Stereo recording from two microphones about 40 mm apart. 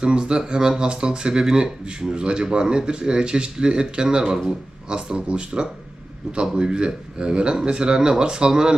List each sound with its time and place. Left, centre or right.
0.0 s speech: right